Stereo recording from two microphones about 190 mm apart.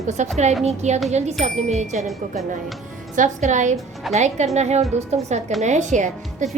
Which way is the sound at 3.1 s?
40° right (ahead or behind).